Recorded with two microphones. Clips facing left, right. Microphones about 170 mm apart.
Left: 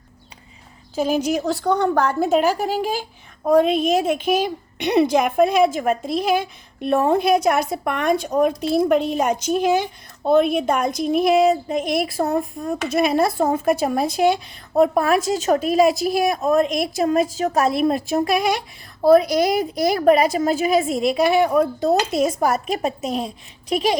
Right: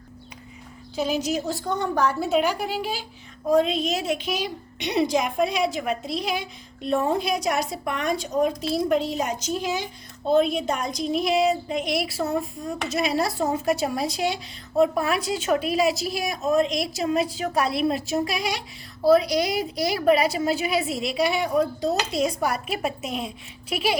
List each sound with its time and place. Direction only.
0.9 s a woman's voice: 50° left (ahead or behind)